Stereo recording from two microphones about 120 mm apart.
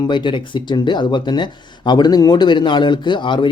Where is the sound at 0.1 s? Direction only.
40° left (ahead or behind).